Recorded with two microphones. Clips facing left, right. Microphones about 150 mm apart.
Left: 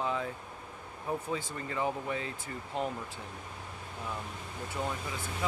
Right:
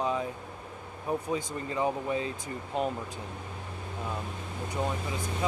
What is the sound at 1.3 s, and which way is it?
Speech, 20° right (ahead or behind).